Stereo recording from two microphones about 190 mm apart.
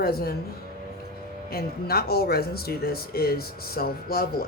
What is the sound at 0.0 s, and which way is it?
Speech, 55° left (ahead or behind).